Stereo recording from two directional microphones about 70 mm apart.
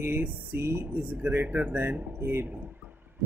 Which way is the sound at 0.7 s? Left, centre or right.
Right.